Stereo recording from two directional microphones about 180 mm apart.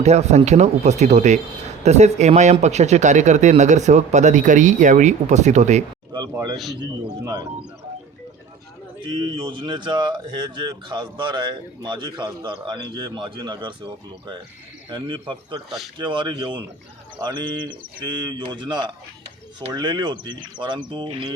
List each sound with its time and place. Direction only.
0.0 s speech: 35° right (ahead or behind)
6.1 s speech: 20° right (ahead or behind)
9.0 s speech: 25° right (ahead or behind)